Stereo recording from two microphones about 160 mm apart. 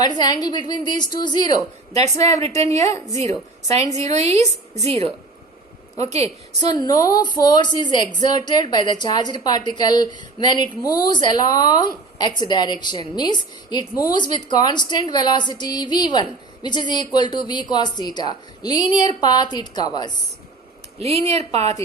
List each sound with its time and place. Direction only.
0.0 s a woman's voice: 25° left (ahead or behind)
3.7 s a woman's voice: 45° right (ahead or behind)
6.2 s a woman's voice: 25° left (ahead or behind)
21.0 s a woman's voice: 40° right (ahead or behind)